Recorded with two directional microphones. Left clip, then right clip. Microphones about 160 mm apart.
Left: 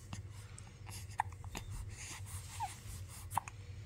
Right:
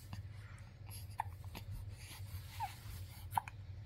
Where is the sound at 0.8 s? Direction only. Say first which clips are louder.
Left 5 dB; 25° left (ahead or behind).